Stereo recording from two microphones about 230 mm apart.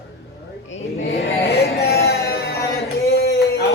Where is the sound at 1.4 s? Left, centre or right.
Left.